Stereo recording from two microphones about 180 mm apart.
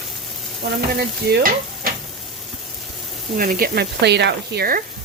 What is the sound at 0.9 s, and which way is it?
Stir, 55° right (ahead or behind).